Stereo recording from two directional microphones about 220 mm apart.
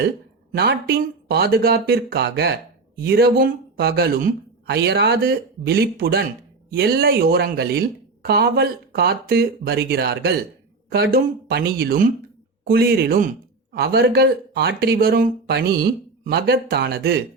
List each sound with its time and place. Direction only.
0.5 s speech: 45° right (ahead or behind)